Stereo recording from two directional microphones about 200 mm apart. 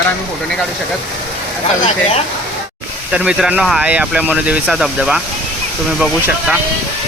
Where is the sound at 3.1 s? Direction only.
5° right (ahead or behind).